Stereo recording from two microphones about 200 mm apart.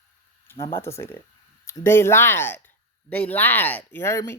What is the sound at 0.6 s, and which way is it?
Speech, 10° left (ahead or behind).